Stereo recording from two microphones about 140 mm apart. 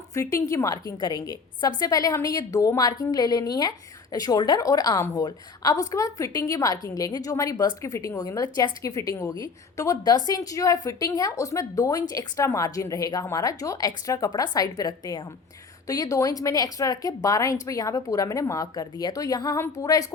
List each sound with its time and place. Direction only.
0.1 s a woman's voice: 20° left (ahead or behind)